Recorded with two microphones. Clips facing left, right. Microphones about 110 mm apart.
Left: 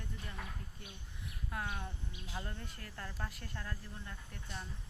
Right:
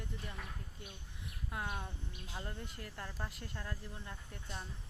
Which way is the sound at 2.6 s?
15° right (ahead or behind).